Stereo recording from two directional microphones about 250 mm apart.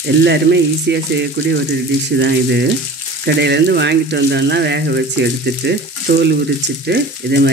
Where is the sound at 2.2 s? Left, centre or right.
Right.